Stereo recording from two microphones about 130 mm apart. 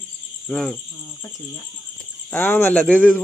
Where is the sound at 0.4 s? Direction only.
5° left (ahead or behind).